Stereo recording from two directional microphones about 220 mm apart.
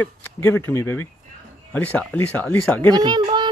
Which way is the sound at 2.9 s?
20° right (ahead or behind).